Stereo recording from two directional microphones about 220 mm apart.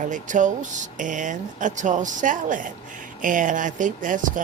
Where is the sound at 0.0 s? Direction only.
35° right (ahead or behind).